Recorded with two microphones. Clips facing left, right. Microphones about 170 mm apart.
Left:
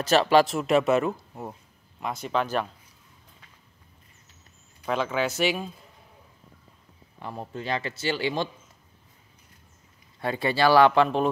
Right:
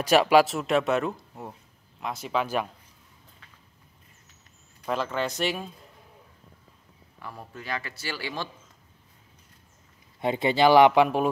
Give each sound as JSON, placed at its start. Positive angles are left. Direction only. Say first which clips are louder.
{"t": 0.0, "sound": "speech", "louder": "right 1 dB", "side_deg": -10}
{"t": 4.8, "sound": "speech", "louder": "left 2 dB", "side_deg": 0}
{"t": 7.2, "sound": "speech", "louder": "left 6 dB", "side_deg": 25}
{"t": 10.2, "sound": "speech", "louder": "right 2 dB", "side_deg": -20}